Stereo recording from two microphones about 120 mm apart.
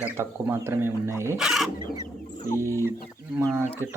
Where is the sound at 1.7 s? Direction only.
40° right (ahead or behind).